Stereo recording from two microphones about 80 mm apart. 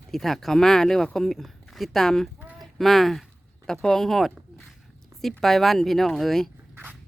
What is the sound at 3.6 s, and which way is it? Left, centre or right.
Speech, centre.